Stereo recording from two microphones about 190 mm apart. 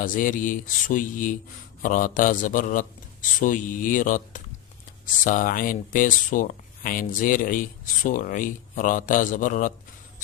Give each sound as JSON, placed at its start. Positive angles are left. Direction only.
{"t": 0.0, "sound": "speech", "side_deg": 45}